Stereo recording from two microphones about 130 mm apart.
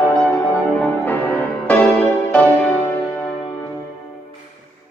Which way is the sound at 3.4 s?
40° left (ahead or behind).